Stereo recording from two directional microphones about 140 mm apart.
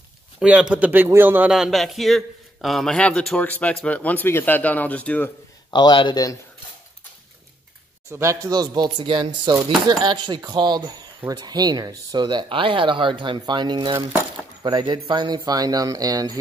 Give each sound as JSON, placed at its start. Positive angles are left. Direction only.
{"t": 0.4, "sound": "a man's voice", "side_deg": -5}
{"t": 1.5, "sound": "a man's voice", "side_deg": 0}
{"t": 5.7, "sound": "speech", "side_deg": 35}
{"t": 8.1, "sound": "speech", "side_deg": -20}